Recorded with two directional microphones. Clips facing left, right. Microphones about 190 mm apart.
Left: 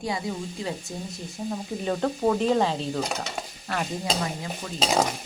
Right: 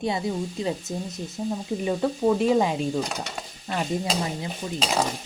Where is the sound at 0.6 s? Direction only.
20° right (ahead or behind).